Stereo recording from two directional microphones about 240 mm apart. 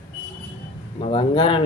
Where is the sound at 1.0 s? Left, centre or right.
Left.